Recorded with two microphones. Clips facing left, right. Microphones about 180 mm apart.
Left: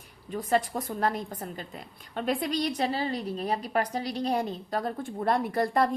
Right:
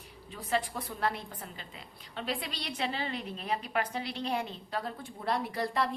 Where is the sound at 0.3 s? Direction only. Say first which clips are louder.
Left 6 dB; 45° left (ahead or behind).